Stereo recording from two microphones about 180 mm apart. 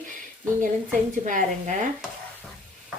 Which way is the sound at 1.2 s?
40° right (ahead or behind).